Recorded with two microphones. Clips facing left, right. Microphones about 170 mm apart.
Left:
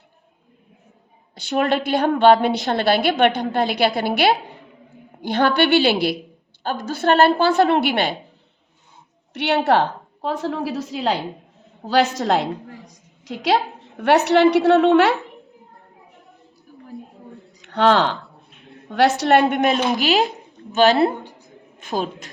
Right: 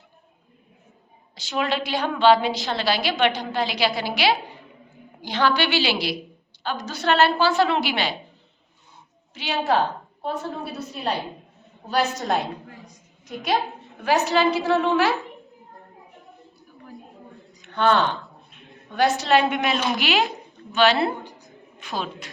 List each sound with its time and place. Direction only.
1.4 s a woman's voice: 55° left (ahead or behind)
9.3 s a woman's voice: 65° left (ahead or behind); by 12.5 s 85° left
12.8 s a sound: 80° left
14.0 s a woman's voice: 75° left (ahead or behind)
17.6 s a woman's voice: 75° left (ahead or behind); by 22.3 s 45° left (ahead or behind)